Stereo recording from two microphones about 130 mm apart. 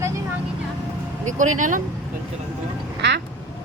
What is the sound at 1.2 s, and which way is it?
Speech, 75° right (ahead or behind).